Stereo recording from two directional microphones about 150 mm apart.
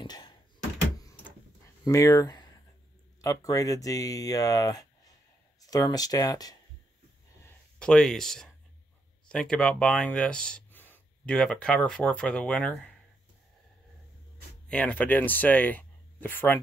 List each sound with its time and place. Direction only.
0.0 s door: 30° left (ahead or behind)
1.9 s speech: 20° left (ahead or behind)
7.4 s speech: 5° left (ahead or behind)
14.7 s speech: 10° left (ahead or behind)